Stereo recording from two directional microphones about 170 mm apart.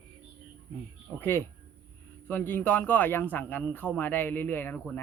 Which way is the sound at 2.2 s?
10° left (ahead or behind).